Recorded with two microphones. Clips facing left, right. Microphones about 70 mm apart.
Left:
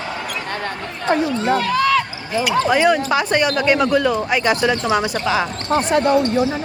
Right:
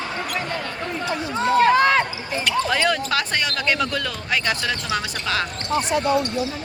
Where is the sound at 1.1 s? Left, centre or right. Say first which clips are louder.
Left 12 dB; left.